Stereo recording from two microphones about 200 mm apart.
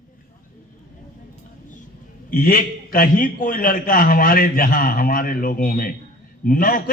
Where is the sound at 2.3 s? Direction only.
45° left (ahead or behind).